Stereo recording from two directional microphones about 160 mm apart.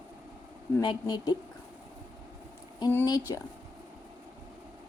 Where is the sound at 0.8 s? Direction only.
25° left (ahead or behind).